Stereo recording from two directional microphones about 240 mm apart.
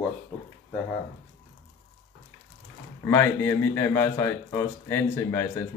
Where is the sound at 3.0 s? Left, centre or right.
Centre.